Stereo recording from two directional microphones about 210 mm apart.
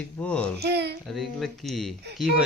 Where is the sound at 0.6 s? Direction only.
50° right (ahead or behind).